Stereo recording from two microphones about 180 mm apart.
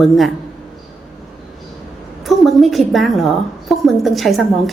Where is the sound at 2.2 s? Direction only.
Centre (ahead or behind).